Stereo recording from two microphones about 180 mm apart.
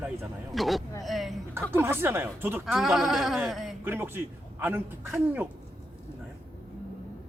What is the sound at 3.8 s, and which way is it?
Speech, 10° right (ahead or behind).